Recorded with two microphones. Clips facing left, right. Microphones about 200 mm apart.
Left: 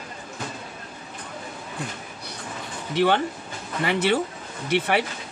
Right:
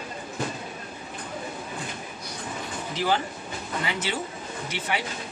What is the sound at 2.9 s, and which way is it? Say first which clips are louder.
Speech: left 6 dB; 65° left (ahead or behind).